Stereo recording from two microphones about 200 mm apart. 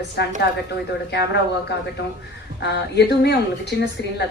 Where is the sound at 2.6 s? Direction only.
55° left (ahead or behind).